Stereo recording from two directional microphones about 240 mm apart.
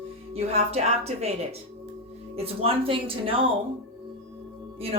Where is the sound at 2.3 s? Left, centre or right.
Right.